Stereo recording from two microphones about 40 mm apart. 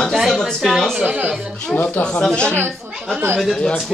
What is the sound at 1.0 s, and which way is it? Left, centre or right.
Speech, right.